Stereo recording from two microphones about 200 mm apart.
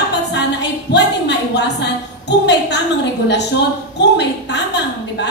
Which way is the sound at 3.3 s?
60° left (ahead or behind).